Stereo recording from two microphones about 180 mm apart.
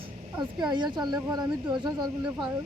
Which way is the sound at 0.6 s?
25° right (ahead or behind).